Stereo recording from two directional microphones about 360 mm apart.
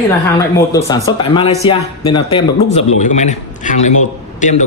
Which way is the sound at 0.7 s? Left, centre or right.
Centre.